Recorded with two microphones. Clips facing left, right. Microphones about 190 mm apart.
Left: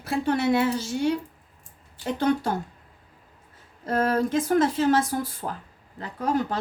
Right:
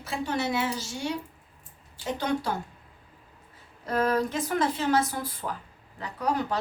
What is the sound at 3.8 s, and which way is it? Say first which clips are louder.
Speech: left 2 dB; 45° left (ahead or behind).